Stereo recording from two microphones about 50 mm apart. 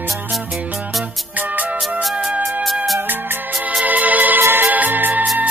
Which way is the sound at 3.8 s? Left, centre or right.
Right.